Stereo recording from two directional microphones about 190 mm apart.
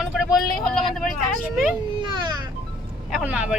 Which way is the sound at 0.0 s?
Centre (ahead or behind).